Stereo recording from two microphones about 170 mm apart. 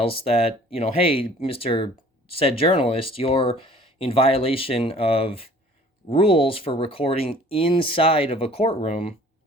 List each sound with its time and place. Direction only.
0.0 s speech: 35° left (ahead or behind)